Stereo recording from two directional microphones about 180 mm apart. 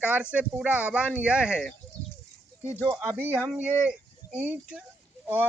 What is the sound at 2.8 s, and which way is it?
Speech, 15° right (ahead or behind).